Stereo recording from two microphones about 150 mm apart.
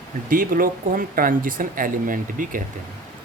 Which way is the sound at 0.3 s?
65° right (ahead or behind).